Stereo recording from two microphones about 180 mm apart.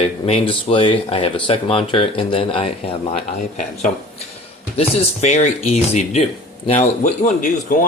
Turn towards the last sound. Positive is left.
turn(degrees=50)  # may be behind; listen again after turning